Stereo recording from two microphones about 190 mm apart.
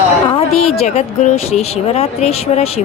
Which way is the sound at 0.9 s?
35° left (ahead or behind).